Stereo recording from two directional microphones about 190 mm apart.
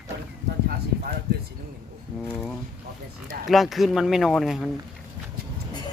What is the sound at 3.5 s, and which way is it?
Speech, centre (ahead or behind).